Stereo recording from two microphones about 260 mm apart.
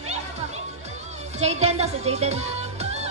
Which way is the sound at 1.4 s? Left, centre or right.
Right.